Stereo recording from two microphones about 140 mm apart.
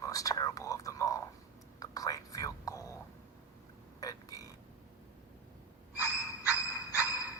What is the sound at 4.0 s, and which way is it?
Burping, 25° left (ahead or behind).